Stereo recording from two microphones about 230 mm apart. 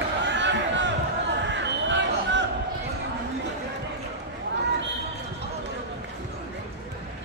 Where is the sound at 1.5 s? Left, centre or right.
Right.